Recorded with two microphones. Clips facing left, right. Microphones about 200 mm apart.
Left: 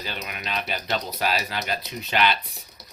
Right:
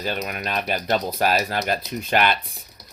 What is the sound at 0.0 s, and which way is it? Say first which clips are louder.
Speech: right 7 dB; 45° right (ahead or behind).